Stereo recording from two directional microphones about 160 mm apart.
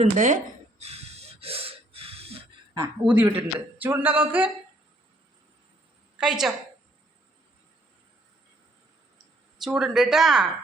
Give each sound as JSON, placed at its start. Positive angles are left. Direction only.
{"t": 0.0, "sound": "speech", "side_deg": -50}
{"t": 0.8, "sound": "snort", "side_deg": -40}
{"t": 2.7, "sound": "a sound", "side_deg": -15}
{"t": 6.1, "sound": "a woman's voice", "side_deg": -5}
{"t": 9.6, "sound": "speech", "side_deg": -5}